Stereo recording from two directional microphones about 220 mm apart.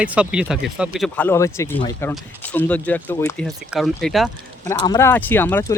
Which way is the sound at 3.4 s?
Centre (ahead or behind).